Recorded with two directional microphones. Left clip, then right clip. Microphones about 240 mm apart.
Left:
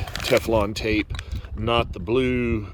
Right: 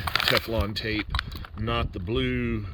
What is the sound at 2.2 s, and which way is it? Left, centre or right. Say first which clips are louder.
Speech: left 6 dB; left.